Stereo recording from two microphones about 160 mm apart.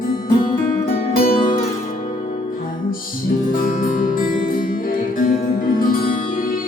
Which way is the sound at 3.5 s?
60° left (ahead or behind).